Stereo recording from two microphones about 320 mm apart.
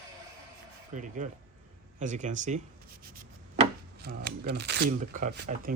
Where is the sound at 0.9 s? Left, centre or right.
Right.